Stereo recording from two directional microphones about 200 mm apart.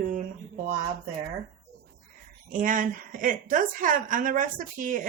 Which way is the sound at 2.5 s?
40° right (ahead or behind).